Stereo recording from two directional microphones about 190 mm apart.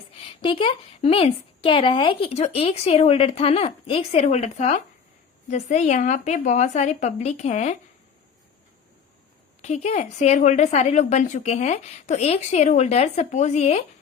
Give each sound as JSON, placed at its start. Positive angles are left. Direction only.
{"t": 0.2, "sound": "a woman's voice", "side_deg": 30}
{"t": 9.6, "sound": "a woman's voice", "side_deg": 35}